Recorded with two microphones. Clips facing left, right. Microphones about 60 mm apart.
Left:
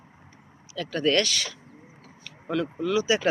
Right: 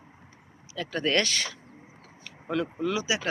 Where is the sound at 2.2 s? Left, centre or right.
Centre.